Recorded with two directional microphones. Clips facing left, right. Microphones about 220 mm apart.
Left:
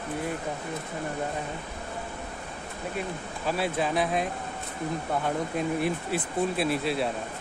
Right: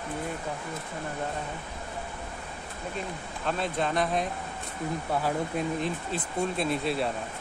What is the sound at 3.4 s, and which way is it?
Speech, 5° left (ahead or behind).